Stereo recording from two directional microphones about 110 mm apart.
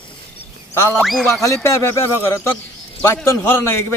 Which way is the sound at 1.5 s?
25° left (ahead or behind).